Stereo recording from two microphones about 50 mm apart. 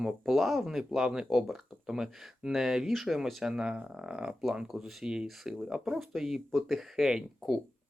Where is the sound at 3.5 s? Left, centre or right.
Centre.